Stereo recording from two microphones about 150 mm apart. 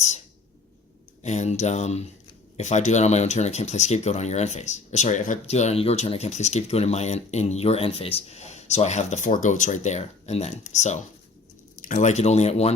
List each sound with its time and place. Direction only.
1.2 s speech: 50° left (ahead or behind)